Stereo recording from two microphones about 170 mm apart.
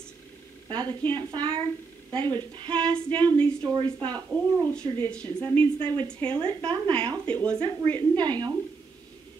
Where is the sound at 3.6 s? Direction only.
25° right (ahead or behind).